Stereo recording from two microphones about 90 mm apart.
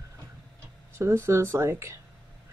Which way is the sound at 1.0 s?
30° right (ahead or behind).